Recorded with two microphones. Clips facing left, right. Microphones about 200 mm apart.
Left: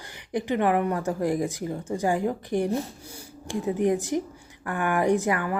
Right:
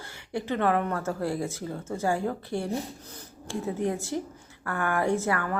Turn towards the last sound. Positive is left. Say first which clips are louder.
# left 3 dB
turn(degrees=15)  # may be behind; listen again after turning